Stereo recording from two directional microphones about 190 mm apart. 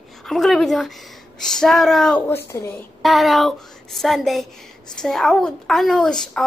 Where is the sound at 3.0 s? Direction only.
Centre (ahead or behind).